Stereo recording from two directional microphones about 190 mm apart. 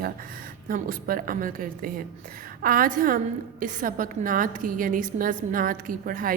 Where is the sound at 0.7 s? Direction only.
45° right (ahead or behind).